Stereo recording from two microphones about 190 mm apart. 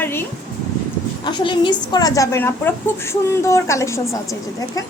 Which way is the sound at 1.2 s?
25° left (ahead or behind).